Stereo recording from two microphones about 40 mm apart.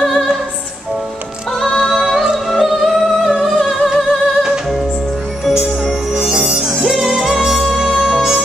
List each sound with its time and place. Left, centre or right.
0.0 s music: centre
1.6 s music: centre
6.1 s music: centre
7.1 s music: centre